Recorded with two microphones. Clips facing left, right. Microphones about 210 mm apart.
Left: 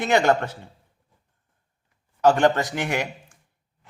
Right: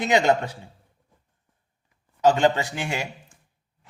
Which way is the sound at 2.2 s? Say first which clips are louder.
Left 1 dB; 15° right (ahead or behind).